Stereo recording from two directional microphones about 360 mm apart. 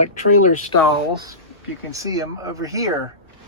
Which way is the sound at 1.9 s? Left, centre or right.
Centre.